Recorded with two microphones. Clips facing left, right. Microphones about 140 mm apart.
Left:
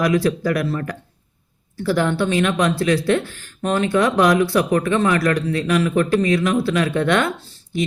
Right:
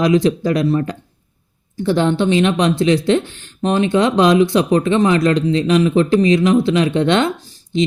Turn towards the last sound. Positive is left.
turn(degrees=-20)  # may be behind; listen again after turning